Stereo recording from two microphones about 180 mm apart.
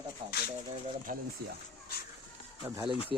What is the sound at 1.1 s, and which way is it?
Speech, 50° right (ahead or behind).